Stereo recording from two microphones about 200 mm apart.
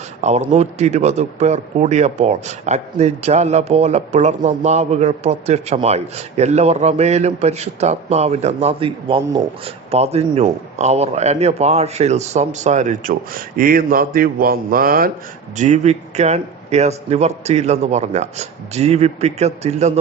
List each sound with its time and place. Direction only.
0.2 s a man's voice: 35° right (ahead or behind)
15.5 s a man's voice: 35° right (ahead or behind)